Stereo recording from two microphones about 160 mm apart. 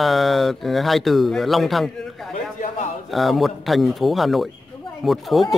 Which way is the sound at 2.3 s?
50° left (ahead or behind).